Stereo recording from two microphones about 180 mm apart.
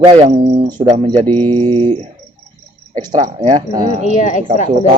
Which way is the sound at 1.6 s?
25° right (ahead or behind).